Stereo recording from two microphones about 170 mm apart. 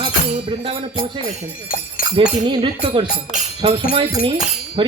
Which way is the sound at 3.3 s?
35° right (ahead or behind).